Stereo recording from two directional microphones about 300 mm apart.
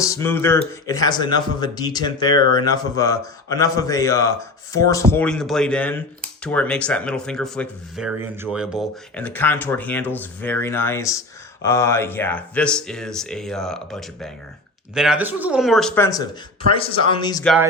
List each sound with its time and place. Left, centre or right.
0.0 s a man's voice: centre
17.4 s speech: centre